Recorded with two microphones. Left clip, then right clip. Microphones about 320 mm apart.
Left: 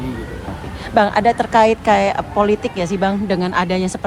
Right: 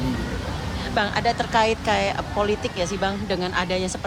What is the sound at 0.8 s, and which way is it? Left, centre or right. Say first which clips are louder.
A woman's voice: left 9 dB; centre.